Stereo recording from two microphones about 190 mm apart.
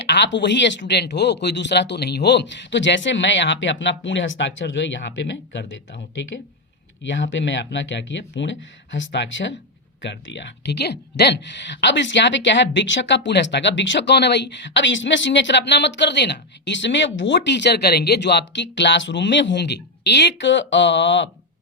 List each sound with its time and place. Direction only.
0.1 s speech: 70° left (ahead or behind)